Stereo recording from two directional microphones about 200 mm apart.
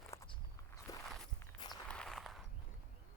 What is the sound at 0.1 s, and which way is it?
Walk, 15° left (ahead or behind).